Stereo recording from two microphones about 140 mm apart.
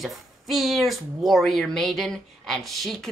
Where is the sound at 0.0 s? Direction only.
Centre (ahead or behind).